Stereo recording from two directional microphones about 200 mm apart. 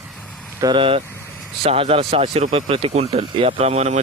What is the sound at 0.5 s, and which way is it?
Speech, 20° right (ahead or behind).